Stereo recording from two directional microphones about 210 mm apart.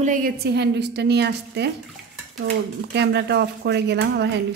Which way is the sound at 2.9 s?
55° right (ahead or behind).